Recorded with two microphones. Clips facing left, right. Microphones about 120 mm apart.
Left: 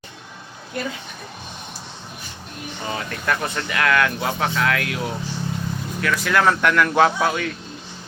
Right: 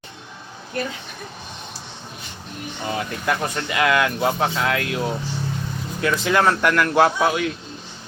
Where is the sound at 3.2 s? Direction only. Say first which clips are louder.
Left 1 dB; 10° right (ahead or behind).